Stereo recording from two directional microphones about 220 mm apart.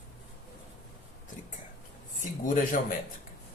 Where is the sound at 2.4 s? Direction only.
35° left (ahead or behind).